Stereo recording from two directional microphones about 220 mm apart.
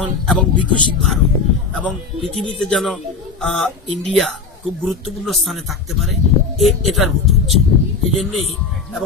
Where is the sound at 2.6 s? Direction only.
Centre (ahead or behind).